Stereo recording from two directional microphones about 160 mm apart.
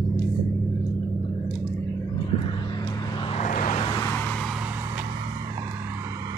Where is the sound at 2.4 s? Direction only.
30° left (ahead or behind).